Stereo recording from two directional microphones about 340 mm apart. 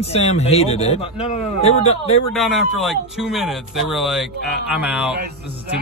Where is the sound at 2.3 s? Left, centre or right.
Centre.